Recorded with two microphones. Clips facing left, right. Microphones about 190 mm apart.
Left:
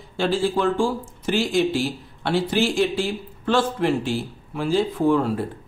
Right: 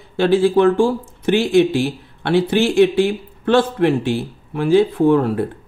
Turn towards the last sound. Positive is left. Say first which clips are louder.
# right 5 dB
turn(degrees=-60)  # may be behind; listen again after turning